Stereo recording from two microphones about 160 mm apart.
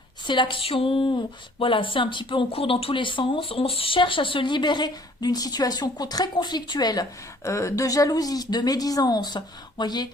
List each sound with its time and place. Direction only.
0.3 s speech: 30° left (ahead or behind)